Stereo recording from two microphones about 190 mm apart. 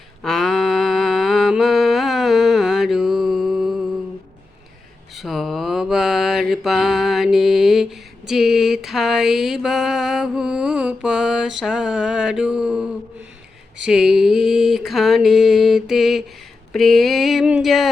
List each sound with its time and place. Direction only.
0.2 s mantra: centre (ahead or behind)
5.1 s mantra: centre (ahead or behind)
8.3 s music: centre (ahead or behind)
13.8 s mantra: 5° right (ahead or behind)
16.7 s a sound: centre (ahead or behind)